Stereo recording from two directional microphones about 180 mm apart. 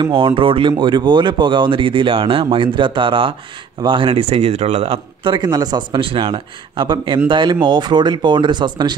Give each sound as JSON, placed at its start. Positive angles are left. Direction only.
{"t": 0.0, "sound": "speech", "side_deg": -30}